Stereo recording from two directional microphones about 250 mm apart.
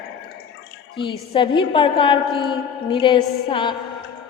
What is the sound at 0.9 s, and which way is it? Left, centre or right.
A woman's voice, centre.